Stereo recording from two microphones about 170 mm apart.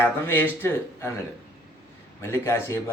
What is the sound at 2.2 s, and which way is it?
Speech, 15° left (ahead or behind).